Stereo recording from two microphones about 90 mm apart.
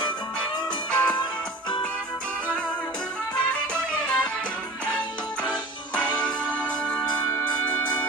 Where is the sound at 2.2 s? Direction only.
10° left (ahead or behind).